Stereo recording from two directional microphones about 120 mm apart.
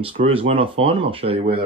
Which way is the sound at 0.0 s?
50° right (ahead or behind).